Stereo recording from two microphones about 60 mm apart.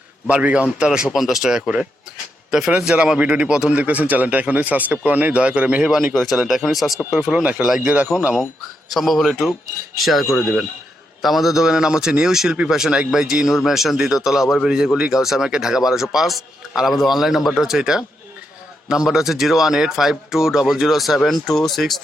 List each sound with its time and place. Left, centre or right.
0.3 s a man's voice: right
5.9 s a man's voice: centre
7.1 s a man's voice: centre
8.1 s speech: left
8.9 s a man's voice: centre